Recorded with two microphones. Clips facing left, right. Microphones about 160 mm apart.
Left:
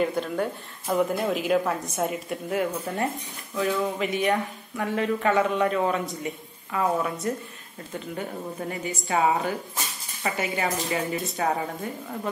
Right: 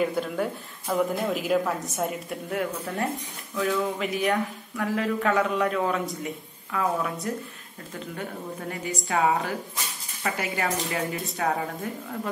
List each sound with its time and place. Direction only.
0.0 s speech: 5° right (ahead or behind)
0.8 s speech: 10° left (ahead or behind)